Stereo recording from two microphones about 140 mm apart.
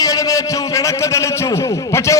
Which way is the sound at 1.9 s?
20° left (ahead or behind).